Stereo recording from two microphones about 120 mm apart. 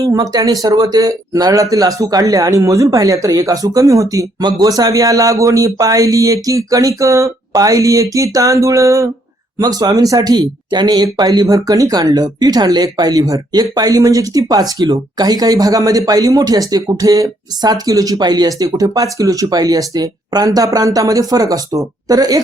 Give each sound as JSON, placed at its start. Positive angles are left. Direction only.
{"t": 0.0, "sound": "a man's voice", "side_deg": -30}